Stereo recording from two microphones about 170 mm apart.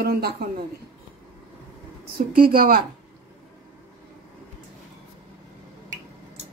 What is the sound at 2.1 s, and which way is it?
Speech, 60° right (ahead or behind).